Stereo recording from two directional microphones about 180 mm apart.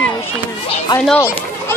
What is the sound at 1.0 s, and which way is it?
Speech, 10° left (ahead or behind).